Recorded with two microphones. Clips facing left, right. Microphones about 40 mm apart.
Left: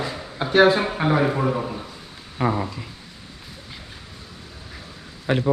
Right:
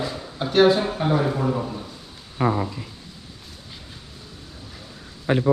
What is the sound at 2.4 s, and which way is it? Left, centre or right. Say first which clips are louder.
Speech: right 1 dB; centre.